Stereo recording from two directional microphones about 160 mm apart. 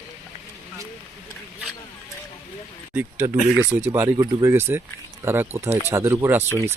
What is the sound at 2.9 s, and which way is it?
Speech, 10° right (ahead or behind).